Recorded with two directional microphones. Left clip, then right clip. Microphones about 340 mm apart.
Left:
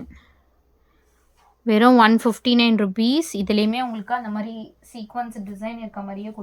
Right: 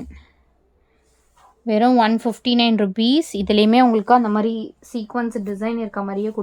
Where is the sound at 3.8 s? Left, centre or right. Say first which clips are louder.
Right 11 dB; right.